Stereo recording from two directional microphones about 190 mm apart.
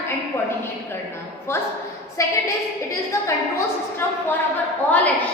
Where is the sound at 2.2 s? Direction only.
15° left (ahead or behind).